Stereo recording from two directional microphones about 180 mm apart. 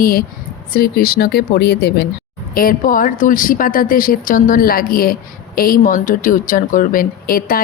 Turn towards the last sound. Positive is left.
turn(degrees=50)  # may be behind; listen again after turning